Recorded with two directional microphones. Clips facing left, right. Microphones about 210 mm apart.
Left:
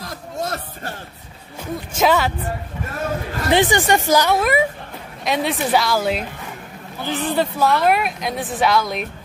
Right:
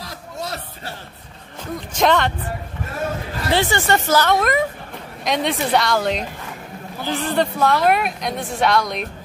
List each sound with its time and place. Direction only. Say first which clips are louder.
0.0 s a sound: left 4 dB; 50° left (ahead or behind)
1.6 s speech: even; 5° left (ahead or behind)
3.4 s speech: left 3 dB; 15° left (ahead or behind)